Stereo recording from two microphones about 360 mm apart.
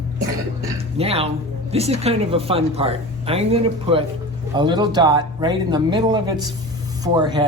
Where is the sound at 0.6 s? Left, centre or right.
Centre.